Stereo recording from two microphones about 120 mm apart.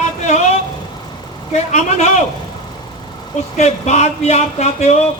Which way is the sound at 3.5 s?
70° left (ahead or behind).